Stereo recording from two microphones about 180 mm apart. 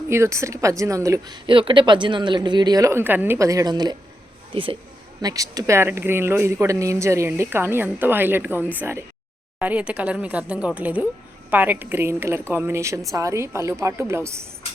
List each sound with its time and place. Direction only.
0.1 s speech: 15° right (ahead or behind)